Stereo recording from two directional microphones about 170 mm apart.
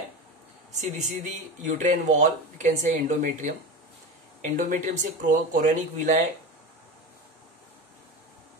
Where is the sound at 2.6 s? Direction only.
50° right (ahead or behind).